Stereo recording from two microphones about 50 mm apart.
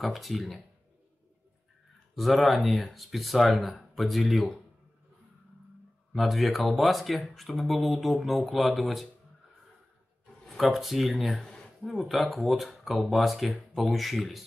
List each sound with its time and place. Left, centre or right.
0.0 s speech: centre
2.1 s speech: centre
6.1 s speech: centre
10.7 s speech: centre
11.3 s a sound: centre
12.1 s speech: centre